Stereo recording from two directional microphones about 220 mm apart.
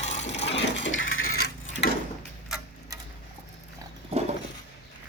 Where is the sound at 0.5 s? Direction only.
55° left (ahead or behind); by 1.8 s 70° left (ahead or behind).